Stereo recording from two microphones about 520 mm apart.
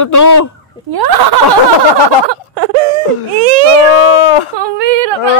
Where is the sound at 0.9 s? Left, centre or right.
Right.